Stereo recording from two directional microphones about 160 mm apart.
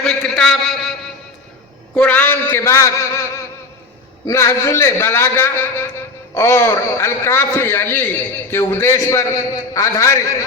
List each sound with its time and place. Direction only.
0.0 s a sound: 5° left (ahead or behind)
2.0 s a man's voice: 10° left (ahead or behind)
4.3 s a man's voice: 15° left (ahead or behind)